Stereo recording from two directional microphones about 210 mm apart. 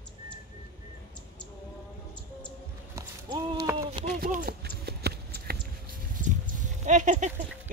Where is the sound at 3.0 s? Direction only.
15° right (ahead or behind).